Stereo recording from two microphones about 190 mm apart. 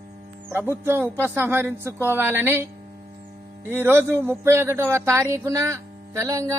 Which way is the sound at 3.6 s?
10° right (ahead or behind).